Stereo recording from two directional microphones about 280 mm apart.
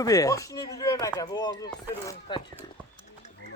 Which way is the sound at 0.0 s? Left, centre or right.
Centre.